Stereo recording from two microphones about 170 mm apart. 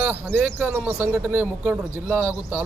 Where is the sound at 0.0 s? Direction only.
10° right (ahead or behind).